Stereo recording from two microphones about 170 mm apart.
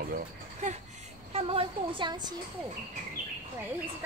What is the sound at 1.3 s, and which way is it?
A woman's voice, 35° right (ahead or behind).